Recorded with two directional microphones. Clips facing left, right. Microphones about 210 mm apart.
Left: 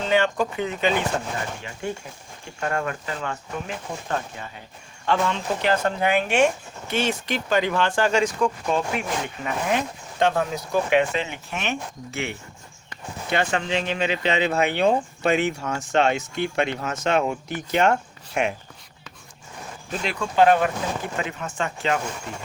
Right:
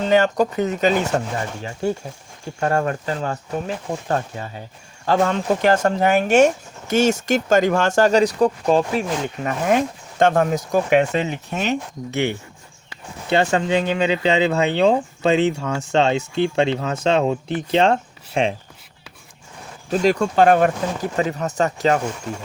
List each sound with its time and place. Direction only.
0.1 s speech: 40° right (ahead or behind)
9.6 s speech: 50° right (ahead or behind)
13.3 s speech: 30° right (ahead or behind)
19.9 s speech: 40° right (ahead or behind)